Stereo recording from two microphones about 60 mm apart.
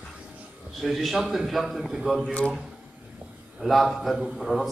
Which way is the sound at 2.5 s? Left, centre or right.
Centre.